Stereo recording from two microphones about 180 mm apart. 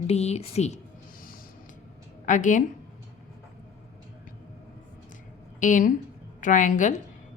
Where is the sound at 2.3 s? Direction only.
45° left (ahead or behind).